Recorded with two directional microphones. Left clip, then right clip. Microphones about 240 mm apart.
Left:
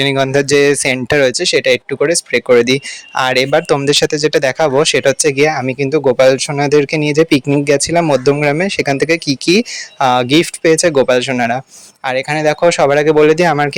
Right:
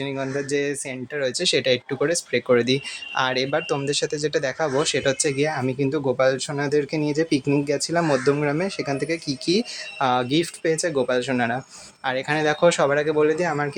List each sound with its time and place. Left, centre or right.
0.0 s speech: left
1.3 s speech: left